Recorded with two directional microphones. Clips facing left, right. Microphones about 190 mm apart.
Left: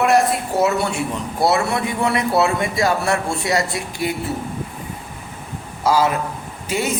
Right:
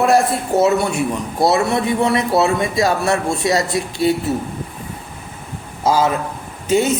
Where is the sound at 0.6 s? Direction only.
15° right (ahead or behind).